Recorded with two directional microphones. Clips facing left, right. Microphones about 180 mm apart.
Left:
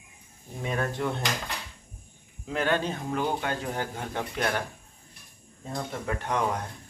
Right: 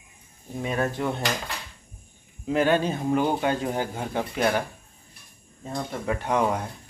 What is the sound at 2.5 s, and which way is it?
Speech, 10° right (ahead or behind).